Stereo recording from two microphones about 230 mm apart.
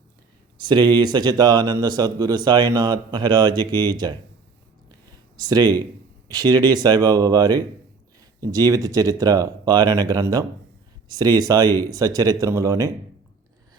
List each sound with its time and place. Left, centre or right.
0.6 s speech: centre
4.9 s a sound: centre
6.3 s speech: centre